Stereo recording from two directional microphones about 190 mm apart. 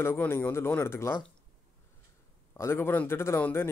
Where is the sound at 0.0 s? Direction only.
10° left (ahead or behind).